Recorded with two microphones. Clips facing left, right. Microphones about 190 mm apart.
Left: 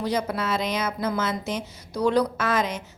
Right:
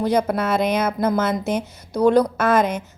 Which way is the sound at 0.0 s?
55° right (ahead or behind).